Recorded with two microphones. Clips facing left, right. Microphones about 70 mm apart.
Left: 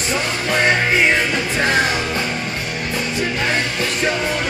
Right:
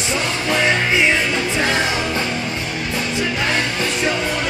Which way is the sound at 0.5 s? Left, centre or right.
Left.